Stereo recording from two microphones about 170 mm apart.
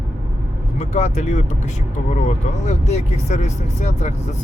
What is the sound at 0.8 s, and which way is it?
Speech, 40° left (ahead or behind).